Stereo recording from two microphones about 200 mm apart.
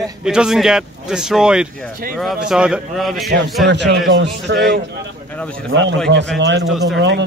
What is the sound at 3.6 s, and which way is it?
Speech, 60° right (ahead or behind).